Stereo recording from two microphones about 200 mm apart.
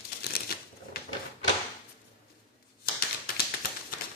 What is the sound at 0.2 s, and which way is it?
Crumpling, 50° left (ahead or behind).